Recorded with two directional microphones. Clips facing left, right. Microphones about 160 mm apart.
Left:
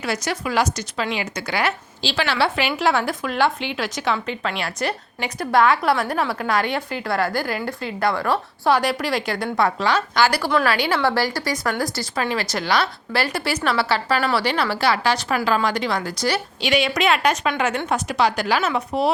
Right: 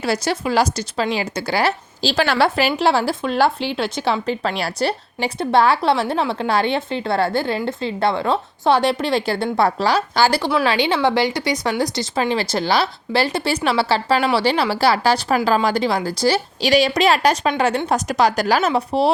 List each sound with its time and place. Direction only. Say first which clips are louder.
0.0 s a woman's voice: right 4 dB; 30° right (ahead or behind)